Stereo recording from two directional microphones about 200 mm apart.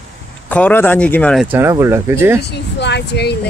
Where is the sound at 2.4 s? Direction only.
60° left (ahead or behind).